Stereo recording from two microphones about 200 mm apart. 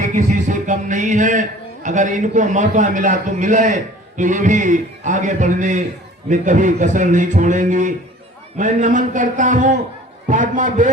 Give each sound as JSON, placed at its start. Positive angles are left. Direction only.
{"t": 0.0, "sound": "speech", "side_deg": -40}